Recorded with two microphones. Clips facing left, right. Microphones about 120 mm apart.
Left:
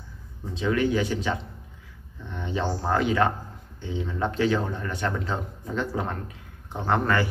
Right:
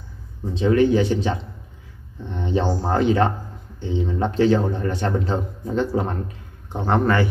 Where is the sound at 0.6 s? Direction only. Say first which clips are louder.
Right 7 dB; 30° right (ahead or behind).